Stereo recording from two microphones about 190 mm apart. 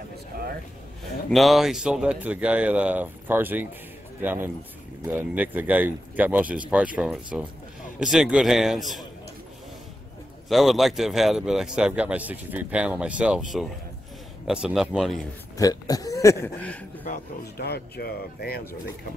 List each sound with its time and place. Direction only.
0.3 s a sound: 55° right (ahead or behind)
1.3 s speech: centre (ahead or behind)
10.5 s speech: centre (ahead or behind)
15.5 s a man's voice: 20° left (ahead or behind)
17.0 s speech: 55° left (ahead or behind)